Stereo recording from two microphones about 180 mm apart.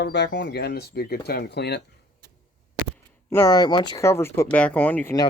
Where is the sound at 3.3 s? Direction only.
15° left (ahead or behind).